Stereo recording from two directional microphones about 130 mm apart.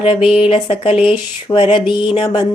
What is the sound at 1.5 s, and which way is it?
Mantra, 40° left (ahead or behind).